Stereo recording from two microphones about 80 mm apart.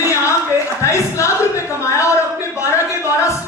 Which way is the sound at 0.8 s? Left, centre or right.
Left.